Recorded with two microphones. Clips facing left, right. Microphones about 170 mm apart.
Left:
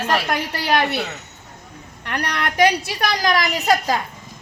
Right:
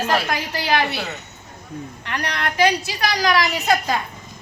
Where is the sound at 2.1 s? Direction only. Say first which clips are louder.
Left 2 dB; 65° left (ahead or behind); by 3.9 s 35° left (ahead or behind).